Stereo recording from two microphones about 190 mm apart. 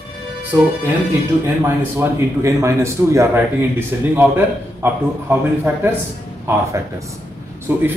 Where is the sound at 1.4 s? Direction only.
15° right (ahead or behind).